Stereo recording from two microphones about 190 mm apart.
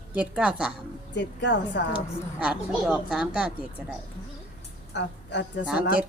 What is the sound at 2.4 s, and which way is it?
A woman's voice, 5° right (ahead or behind).